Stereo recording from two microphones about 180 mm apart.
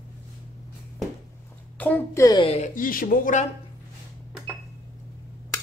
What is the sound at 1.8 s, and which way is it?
Speech, 10° left (ahead or behind).